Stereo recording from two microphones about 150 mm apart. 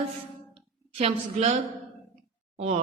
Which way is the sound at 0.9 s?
45° right (ahead or behind).